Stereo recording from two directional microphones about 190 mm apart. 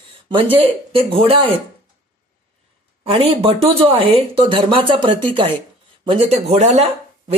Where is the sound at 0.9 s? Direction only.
30° right (ahead or behind).